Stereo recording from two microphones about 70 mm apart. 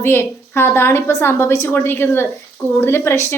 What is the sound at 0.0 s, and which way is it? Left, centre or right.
A woman's voice, left.